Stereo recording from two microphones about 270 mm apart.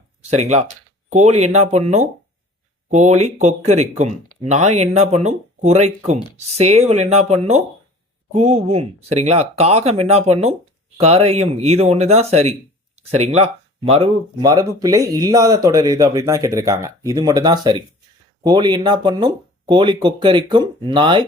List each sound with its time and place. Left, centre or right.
0.2 s speech: right